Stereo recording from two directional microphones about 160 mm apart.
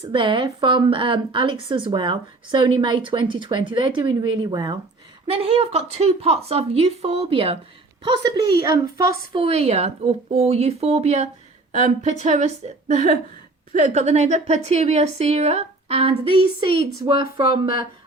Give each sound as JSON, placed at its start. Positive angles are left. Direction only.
{"t": 0.0, "sound": "a woman's voice", "side_deg": -30}
{"t": 9.3, "sound": "a woman's voice", "side_deg": -35}